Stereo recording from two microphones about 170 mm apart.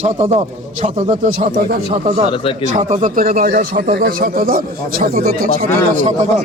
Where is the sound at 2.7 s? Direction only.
45° right (ahead or behind).